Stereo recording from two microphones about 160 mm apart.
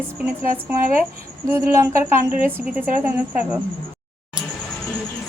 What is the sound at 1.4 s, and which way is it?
A woman's voice, 15° right (ahead or behind).